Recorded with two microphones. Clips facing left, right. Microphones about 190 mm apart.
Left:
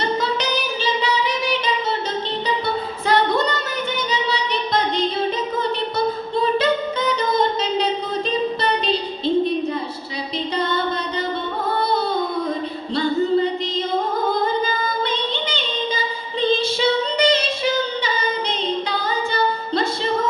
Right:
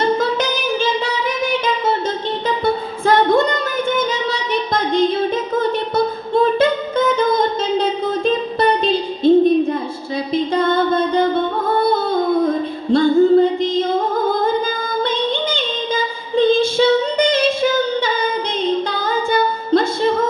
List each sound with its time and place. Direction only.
0.0 s singing: 50° right (ahead or behind)
3.1 s singing: 50° right (ahead or behind)
3.9 s music: 50° right (ahead or behind)
6.3 s singing: 50° right (ahead or behind)
10.3 s music: 50° right (ahead or behind)
14.4 s female singing: 50° right (ahead or behind)